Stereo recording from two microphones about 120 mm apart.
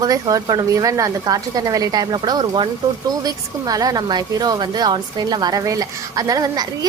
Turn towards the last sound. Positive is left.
turn(degrees=-30)  # may be behind; listen again after turning